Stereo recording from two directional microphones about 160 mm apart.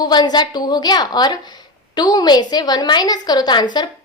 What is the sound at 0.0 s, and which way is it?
A woman's voice, 25° left (ahead or behind).